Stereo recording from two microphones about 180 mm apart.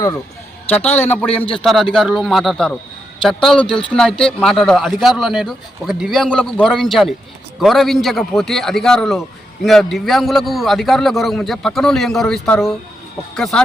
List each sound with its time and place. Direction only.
0.9 s a man's voice: 10° left (ahead or behind)